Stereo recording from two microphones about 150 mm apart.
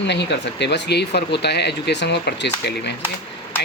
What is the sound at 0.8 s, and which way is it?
Speech, 90° left.